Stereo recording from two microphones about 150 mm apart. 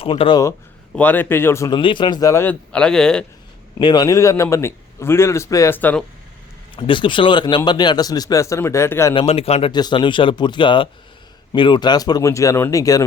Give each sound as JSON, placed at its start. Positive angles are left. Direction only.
{"t": 0.0, "sound": "speech", "side_deg": 35}
{"t": 0.9, "sound": "a man's voice", "side_deg": 10}
{"t": 1.7, "sound": "a man's voice", "side_deg": 30}
{"t": 3.8, "sound": "a man's voice", "side_deg": 30}
{"t": 6.7, "sound": "a man's voice", "side_deg": 35}
{"t": 9.1, "sound": "speech", "side_deg": 40}
{"t": 9.7, "sound": "a man's voice", "side_deg": 30}